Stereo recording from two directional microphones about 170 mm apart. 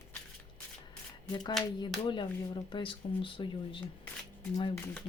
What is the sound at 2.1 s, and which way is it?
Speech, 30° left (ahead or behind).